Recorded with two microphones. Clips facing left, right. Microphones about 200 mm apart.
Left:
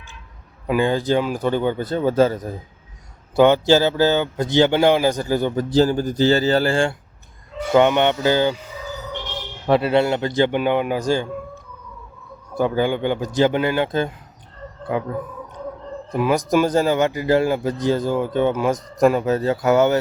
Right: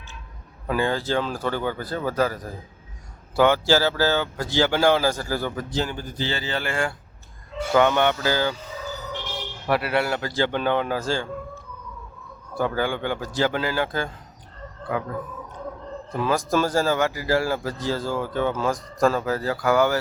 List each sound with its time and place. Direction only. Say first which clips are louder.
0.7 s a man's voice: left 5 dB; 15° left (ahead or behind)
5.7 s speech: left 11 dB; 40° left (ahead or behind)
7.7 s a man's voice: left 4 dB; 20° left (ahead or behind)
9.6 s a man's voice: left 6 dB; 25° left (ahead or behind)
16.1 s a man's voice: left 5 dB; 15° left (ahead or behind)